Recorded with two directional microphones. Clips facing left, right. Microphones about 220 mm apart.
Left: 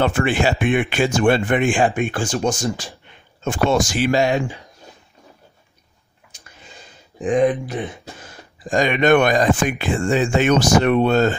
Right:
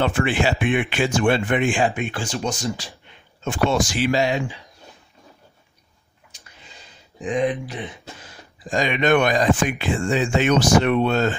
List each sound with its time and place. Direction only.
0.0 s speech: 45° left (ahead or behind)
7.2 s speech: 50° left (ahead or behind)